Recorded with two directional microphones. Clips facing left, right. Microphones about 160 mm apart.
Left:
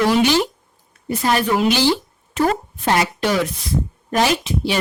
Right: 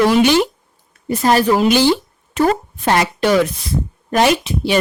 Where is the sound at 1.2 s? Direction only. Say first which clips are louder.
Right 4 dB; 35° right (ahead or behind).